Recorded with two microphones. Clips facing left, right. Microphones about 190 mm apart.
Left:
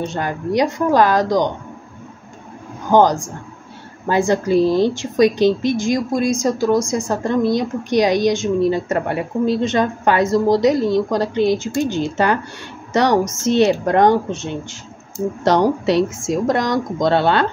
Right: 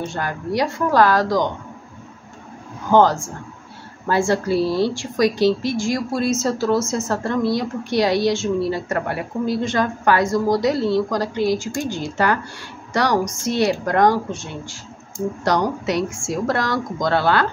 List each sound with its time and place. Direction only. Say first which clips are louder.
0.0 s a woman's voice: left 3 dB; 20° left (ahead or behind)
2.9 s a woman's voice: left 1 dB; 15° left (ahead or behind)